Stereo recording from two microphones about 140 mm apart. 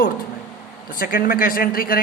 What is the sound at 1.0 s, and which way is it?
A man's voice, 90° left.